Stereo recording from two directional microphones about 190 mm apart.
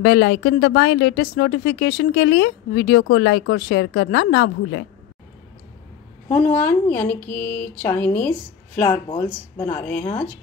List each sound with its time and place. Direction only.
0.0 s speech: 65° left (ahead or behind)
6.2 s a woman's voice: 10° left (ahead or behind)
9.0 s speech: 25° left (ahead or behind)